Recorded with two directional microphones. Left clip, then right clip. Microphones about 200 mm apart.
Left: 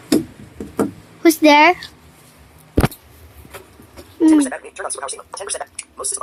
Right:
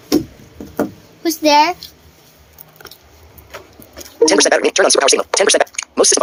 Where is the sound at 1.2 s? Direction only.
30° left (ahead or behind).